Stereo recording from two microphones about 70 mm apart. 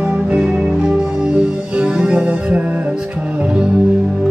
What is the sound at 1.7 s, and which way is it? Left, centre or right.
Music, centre.